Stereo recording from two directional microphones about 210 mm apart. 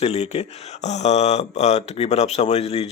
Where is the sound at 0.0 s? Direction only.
30° left (ahead or behind).